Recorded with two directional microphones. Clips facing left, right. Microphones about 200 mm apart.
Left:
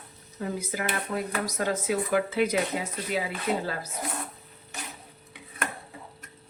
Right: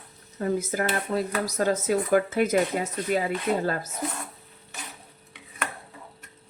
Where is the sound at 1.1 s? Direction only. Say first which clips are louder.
Right 3 dB; 35° right (ahead or behind).